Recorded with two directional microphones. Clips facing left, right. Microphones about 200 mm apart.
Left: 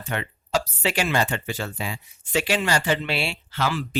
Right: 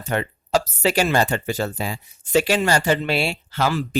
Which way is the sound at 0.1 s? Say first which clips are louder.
Right 5 dB; 40° right (ahead or behind).